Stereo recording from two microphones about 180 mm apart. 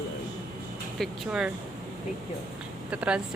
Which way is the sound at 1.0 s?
5° right (ahead or behind).